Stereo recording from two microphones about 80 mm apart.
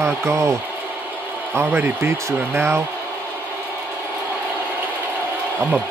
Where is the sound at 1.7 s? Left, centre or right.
Right.